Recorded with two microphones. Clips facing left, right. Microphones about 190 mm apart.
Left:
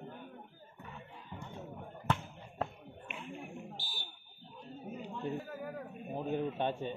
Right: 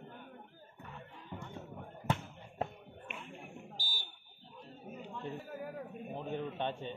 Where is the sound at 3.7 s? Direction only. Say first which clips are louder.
Left 1 dB; 40° right (ahead or behind).